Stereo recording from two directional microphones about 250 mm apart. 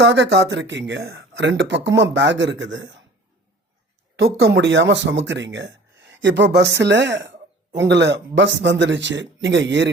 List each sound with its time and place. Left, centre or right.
0.0 s speech: right
4.2 s speech: right